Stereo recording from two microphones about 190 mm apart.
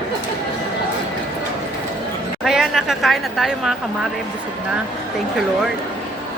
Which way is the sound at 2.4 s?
Centre (ahead or behind).